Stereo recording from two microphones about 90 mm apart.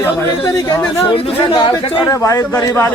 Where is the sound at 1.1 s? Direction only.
80° left.